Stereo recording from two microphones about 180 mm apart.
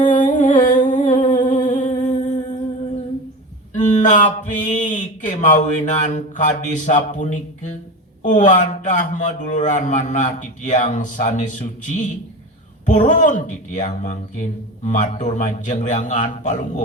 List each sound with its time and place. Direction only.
0.0 s humming: 45° left (ahead or behind)
3.8 s speech: 45° left (ahead or behind)